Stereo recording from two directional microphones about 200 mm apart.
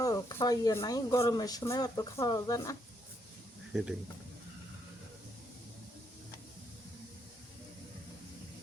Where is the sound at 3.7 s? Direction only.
5° right (ahead or behind).